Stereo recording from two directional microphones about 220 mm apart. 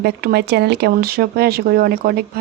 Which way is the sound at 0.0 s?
45° right (ahead or behind).